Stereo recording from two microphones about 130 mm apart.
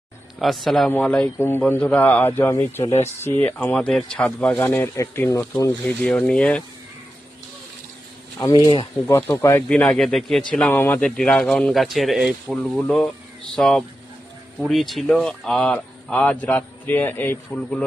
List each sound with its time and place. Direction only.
0.3 s a man's voice: centre (ahead or behind); by 5.7 s 25° left (ahead or behind)
6.0 s speech: 10° left (ahead or behind)
8.4 s speech: 30° left (ahead or behind)
9.0 s speech: 20° left (ahead or behind)
9.6 s a man's voice: 10° left (ahead or behind)
10.7 s a man's voice: 15° left (ahead or behind)